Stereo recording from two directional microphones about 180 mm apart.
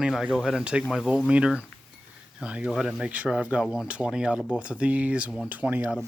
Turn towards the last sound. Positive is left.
turn(degrees=-10)  # may be behind; listen again after turning